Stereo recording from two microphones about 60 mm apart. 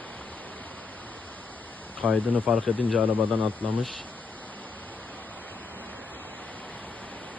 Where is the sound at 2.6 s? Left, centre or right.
Left.